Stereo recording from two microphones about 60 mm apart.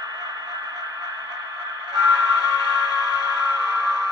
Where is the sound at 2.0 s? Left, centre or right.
Right.